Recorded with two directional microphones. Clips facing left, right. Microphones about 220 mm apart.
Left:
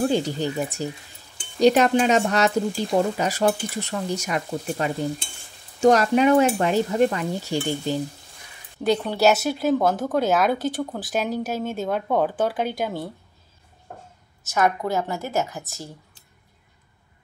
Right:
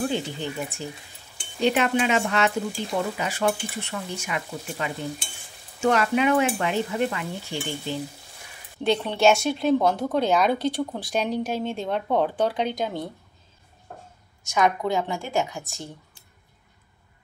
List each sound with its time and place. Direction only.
0.0 s speech: 40° left (ahead or behind)
7.9 s frying: 40° left (ahead or behind)
8.8 s speech: centre (ahead or behind)
14.4 s speech: 5° left (ahead or behind)